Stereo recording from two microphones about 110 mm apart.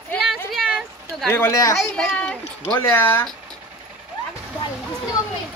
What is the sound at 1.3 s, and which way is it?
Speech, 20° left (ahead or behind).